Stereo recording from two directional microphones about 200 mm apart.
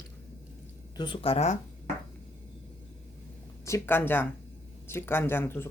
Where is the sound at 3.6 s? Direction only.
15° left (ahead or behind).